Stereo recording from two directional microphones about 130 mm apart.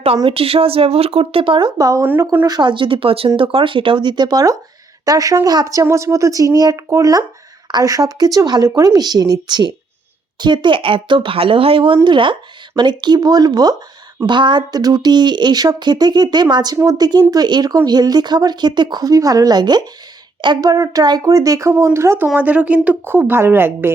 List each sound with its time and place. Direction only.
0.3 s a woman's voice: 45° right (ahead or behind); by 22.3 s 20° right (ahead or behind)
22.4 s speech: 10° right (ahead or behind)